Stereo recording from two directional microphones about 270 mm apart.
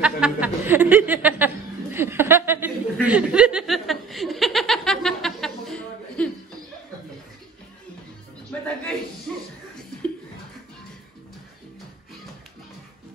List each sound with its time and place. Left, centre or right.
0.0 s chuckle: centre
9.3 s music: centre